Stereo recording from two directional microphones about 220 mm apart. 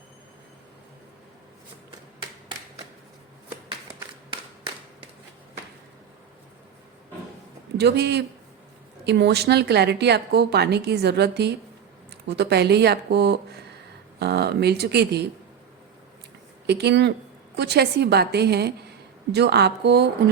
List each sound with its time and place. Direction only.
7.8 s a woman's voice: 50° right (ahead or behind)
16.6 s a woman's voice: 50° right (ahead or behind)